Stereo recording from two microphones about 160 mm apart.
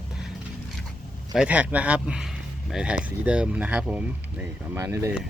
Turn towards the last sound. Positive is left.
turn(degrees=-20)  # may be behind; listen again after turning